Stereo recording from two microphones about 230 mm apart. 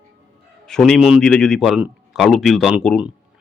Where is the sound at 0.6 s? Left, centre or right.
Centre.